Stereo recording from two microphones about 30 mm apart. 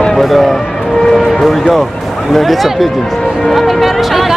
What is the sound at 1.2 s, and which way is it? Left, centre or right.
Speech, centre.